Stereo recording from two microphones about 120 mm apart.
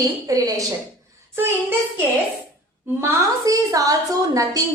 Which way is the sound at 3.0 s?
30° right (ahead or behind).